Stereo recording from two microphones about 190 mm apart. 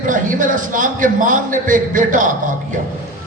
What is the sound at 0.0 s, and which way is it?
A man's voice, 45° right (ahead or behind).